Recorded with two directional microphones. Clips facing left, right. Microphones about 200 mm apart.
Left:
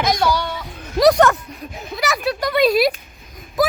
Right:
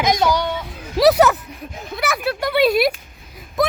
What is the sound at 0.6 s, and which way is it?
Speech, 5° right (ahead or behind).